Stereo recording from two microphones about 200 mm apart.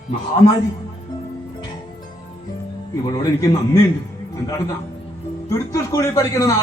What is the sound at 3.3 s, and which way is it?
A man's voice, 15° left (ahead or behind).